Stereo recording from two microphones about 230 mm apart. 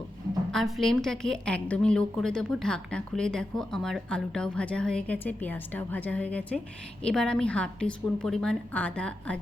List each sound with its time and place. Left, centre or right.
0.5 s a woman's voice: centre